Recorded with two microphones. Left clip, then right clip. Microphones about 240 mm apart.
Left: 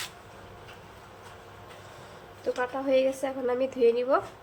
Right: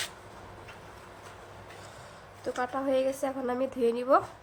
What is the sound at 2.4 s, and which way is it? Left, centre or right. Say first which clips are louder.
A woman's voice: left 2 dB; right.